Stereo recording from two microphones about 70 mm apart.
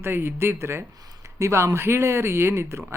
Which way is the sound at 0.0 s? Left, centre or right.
Right.